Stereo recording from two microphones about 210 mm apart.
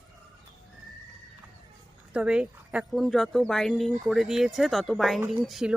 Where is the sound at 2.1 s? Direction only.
5° right (ahead or behind).